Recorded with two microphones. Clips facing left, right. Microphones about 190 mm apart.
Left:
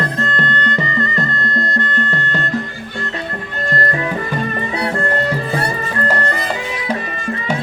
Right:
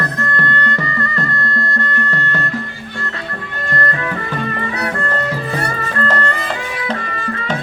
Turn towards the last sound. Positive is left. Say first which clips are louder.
# left 1 dB
turn(degrees=10)  # may be behind; listen again after turning